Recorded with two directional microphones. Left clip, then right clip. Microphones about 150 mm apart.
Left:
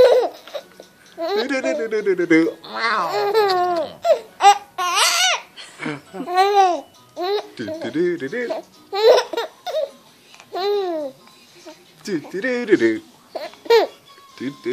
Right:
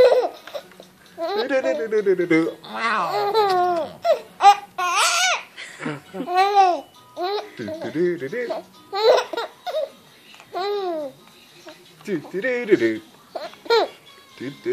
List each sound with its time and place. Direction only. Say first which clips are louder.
0.0 s babbling: left 2 dB; 20° left (ahead or behind)
1.2 s a sound: left 2 dB; 20° left (ahead or behind)
1.5 s speech: right 1 dB; 45° left (ahead or behind)
2.6 s a sound: left 2 dB; 20° left (ahead or behind)
6.2 s babbling: left 1 dB; 20° left (ahead or behind)
7.5 s speech: left 2 dB; 45° left (ahead or behind)
8.5 s babbling: left 2 dB; 20° left (ahead or behind)
12.3 s speech: left 1 dB; 45° left (ahead or behind)
13.3 s babbling: left 4 dB; 25° left (ahead or behind)
14.4 s speech: left 4 dB; 45° left (ahead or behind)